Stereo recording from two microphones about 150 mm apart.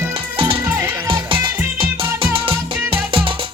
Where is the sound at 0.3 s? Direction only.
35° right (ahead or behind).